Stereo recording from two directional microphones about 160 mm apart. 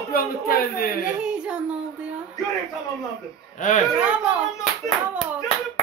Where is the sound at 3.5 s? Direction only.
50° left (ahead or behind).